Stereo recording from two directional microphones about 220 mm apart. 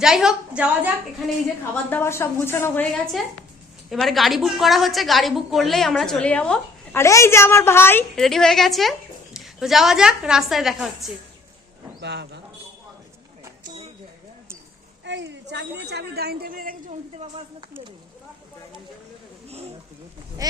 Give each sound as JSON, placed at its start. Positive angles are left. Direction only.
{"t": 0.0, "sound": "a woman's voice", "side_deg": 0}
{"t": 1.7, "sound": "a woman's voice", "side_deg": 10}
{"t": 11.9, "sound": "speech", "side_deg": -50}
{"t": 15.0, "sound": "a woman's voice", "side_deg": -55}
{"t": 19.5, "sound": "a sound", "side_deg": -30}
{"t": 20.4, "sound": "speech", "side_deg": -15}